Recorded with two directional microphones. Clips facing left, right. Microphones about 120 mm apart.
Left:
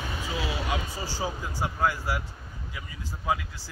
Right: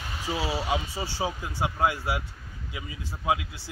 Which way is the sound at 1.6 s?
20° right (ahead or behind).